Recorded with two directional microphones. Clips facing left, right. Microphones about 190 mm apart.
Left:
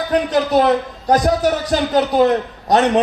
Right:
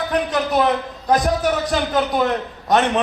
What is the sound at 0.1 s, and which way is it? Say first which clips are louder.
A man's voice: left 6 dB; 40° left (ahead or behind).